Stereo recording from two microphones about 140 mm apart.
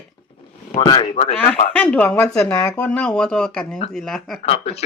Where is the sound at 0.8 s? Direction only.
35° left (ahead or behind).